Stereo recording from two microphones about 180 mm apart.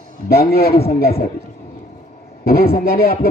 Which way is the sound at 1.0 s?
60° left (ahead or behind).